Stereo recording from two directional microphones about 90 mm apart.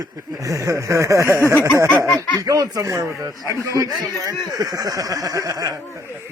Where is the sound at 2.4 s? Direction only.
40° right (ahead or behind).